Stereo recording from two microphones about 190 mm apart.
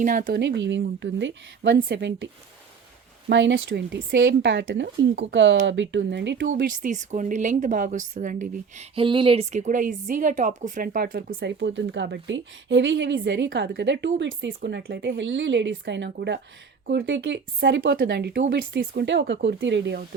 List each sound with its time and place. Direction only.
0.0 s speech: 45° right (ahead or behind)
0.3 s a woman's voice: 70° right (ahead or behind)
3.2 s a woman's voice: 80° right
6.5 s speech: 45° right (ahead or behind)
9.0 s speech: 25° right (ahead or behind); by 11.3 s 50° right (ahead or behind)
11.3 s a woman's voice: 75° right (ahead or behind)